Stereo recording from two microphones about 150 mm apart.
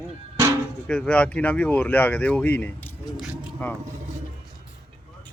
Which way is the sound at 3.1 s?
5° right (ahead or behind).